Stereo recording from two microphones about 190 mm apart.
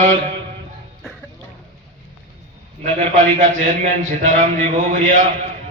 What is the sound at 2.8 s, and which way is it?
A man's voice, 40° right (ahead or behind).